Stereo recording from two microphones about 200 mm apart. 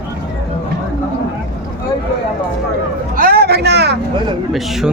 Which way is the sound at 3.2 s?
50° right (ahead or behind).